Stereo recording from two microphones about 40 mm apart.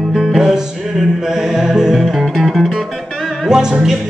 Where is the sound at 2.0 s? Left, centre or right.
Centre.